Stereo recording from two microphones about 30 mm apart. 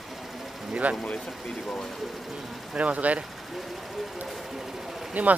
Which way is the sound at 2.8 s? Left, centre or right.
Right.